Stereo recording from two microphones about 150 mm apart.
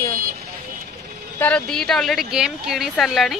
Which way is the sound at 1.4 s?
10° left (ahead or behind).